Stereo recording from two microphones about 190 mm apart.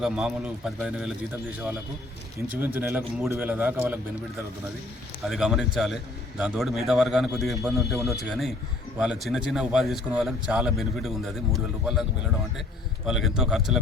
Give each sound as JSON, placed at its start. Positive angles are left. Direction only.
{"t": 0.0, "sound": "a man's voice", "side_deg": -5}
{"t": 2.6, "sound": "a man's voice", "side_deg": -10}
{"t": 5.2, "sound": "a man's voice", "side_deg": 0}
{"t": 13.1, "sound": "a man's voice", "side_deg": -5}